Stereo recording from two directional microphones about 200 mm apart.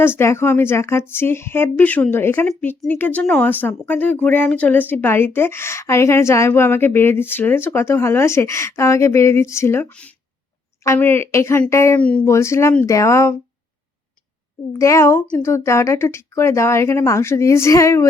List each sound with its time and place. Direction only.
0.0 s speech: 10° left (ahead or behind)
14.7 s speech: 15° left (ahead or behind)